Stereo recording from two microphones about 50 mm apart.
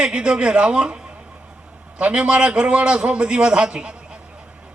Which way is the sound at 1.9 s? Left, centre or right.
Right.